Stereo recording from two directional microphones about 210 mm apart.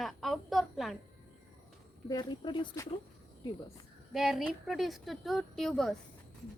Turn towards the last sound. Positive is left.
turn(degrees=0)  # may be behind; listen again after turning